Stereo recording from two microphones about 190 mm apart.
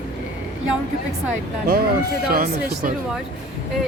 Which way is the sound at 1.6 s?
50° right (ahead or behind).